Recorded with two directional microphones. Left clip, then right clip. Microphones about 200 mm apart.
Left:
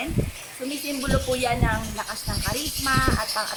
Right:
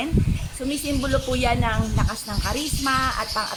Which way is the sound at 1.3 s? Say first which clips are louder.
Left 1 dB; 30° right (ahead or behind).